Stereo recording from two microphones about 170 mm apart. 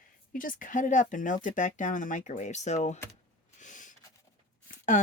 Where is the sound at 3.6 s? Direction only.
45° left (ahead or behind).